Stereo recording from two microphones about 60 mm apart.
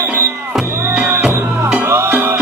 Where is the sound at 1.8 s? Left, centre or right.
Right.